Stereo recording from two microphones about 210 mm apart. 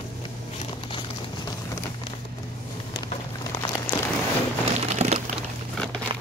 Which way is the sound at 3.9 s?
20° left (ahead or behind).